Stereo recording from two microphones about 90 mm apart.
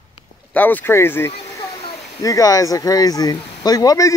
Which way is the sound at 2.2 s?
40° left (ahead or behind).